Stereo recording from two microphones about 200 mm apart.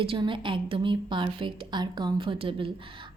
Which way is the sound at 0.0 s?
25° right (ahead or behind).